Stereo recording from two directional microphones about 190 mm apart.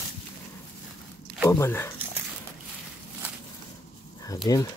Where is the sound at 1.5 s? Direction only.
15° left (ahead or behind).